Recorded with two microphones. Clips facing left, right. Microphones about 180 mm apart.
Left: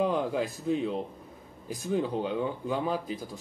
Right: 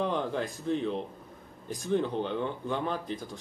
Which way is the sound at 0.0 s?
5° left (ahead or behind).